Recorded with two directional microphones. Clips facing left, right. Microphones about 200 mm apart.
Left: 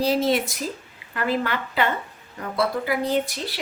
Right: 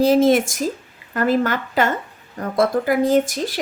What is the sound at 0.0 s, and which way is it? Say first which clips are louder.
A woman's voice: right 7 dB; 50° right (ahead or behind).